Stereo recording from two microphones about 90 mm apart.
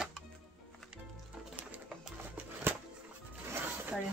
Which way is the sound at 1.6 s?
15° right (ahead or behind).